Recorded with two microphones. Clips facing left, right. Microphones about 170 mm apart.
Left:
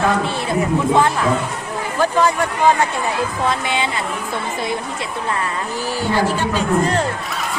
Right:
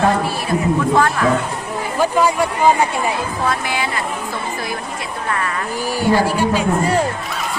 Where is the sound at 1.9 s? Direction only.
10° right (ahead or behind).